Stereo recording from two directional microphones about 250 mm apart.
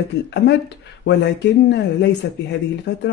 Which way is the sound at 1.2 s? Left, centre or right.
Left.